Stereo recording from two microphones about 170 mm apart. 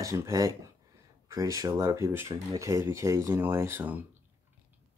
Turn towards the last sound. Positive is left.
turn(degrees=-10)  # may be behind; listen again after turning